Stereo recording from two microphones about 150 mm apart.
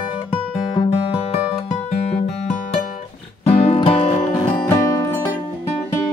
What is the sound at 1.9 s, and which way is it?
Music, 50° left (ahead or behind).